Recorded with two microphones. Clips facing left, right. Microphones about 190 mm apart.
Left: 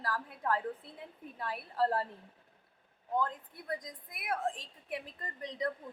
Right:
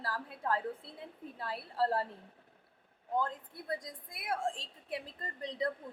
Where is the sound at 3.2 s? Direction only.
30° right (ahead or behind).